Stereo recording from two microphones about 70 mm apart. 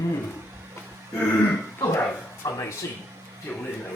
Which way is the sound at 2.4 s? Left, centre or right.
Left.